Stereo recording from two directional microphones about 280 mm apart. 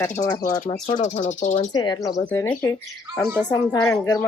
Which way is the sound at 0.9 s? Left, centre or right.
Left.